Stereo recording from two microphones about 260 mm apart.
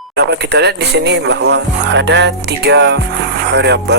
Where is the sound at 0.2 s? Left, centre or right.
Right.